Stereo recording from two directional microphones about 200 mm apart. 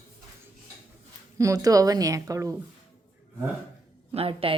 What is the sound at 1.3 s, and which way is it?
Speech, 15° right (ahead or behind).